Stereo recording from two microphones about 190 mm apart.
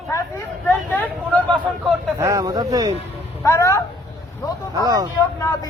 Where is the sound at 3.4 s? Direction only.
15° left (ahead or behind).